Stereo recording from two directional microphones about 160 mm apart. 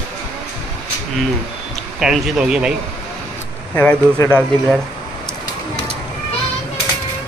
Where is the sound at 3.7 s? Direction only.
10° left (ahead or behind).